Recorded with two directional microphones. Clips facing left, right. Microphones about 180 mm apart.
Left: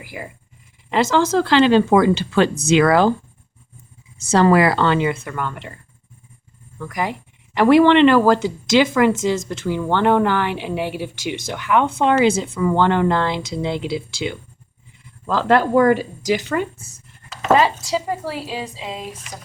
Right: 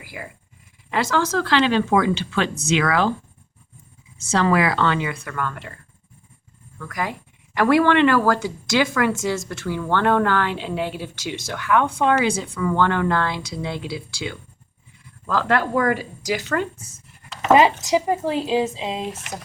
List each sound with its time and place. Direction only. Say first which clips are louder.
0.0 s speech: left 3 dB; 25° left (ahead or behind)
4.2 s speech: left 5 dB; 35° left (ahead or behind); by 5.7 s 20° left (ahead or behind)
6.7 s speech: left 3 dB; 20° left (ahead or behind)
16.8 s a sound: even; centre (ahead or behind)
17.5 s speech: right 1 dB; 15° right (ahead or behind)